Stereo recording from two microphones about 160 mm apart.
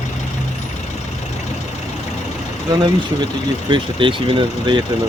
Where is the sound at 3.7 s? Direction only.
30° right (ahead or behind).